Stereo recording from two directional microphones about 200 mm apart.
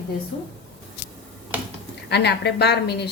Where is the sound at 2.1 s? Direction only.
55° left (ahead or behind).